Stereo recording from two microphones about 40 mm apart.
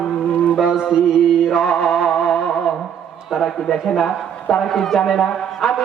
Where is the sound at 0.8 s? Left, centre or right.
Centre.